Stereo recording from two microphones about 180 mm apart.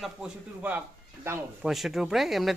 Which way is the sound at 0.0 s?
5° right (ahead or behind).